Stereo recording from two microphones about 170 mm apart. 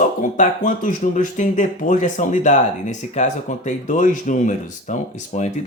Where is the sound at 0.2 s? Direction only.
50° left (ahead or behind).